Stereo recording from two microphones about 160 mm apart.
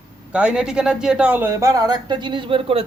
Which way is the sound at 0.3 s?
5° right (ahead or behind).